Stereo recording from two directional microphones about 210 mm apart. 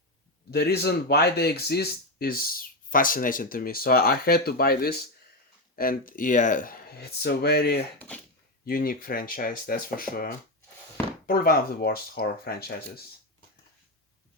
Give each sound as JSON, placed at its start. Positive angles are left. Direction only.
{"t": 0.5, "sound": "speech", "side_deg": 50}
{"t": 7.9, "sound": "speech", "side_deg": 5}
{"t": 8.6, "sound": "speech", "side_deg": 45}
{"t": 11.3, "sound": "speech", "side_deg": 45}